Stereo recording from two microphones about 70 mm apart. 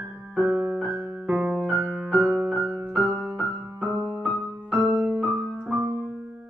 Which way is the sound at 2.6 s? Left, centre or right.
Right.